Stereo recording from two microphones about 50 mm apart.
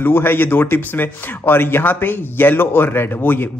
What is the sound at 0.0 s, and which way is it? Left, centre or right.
Speech, left.